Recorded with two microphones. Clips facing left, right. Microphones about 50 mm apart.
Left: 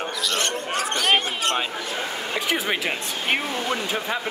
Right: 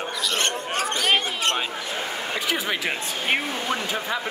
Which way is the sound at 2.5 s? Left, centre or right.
Centre.